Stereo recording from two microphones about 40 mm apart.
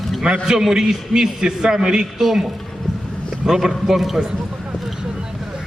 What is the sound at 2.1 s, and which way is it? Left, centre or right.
Speech, centre.